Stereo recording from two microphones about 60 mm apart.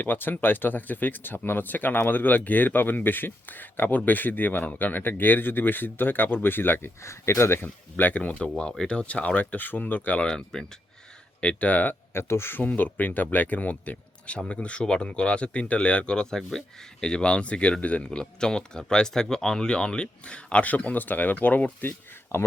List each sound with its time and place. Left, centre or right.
0.0 s speech: left
7.6 s speech: left
10.2 s speech: centre; by 11.9 s left
12.1 s speech: left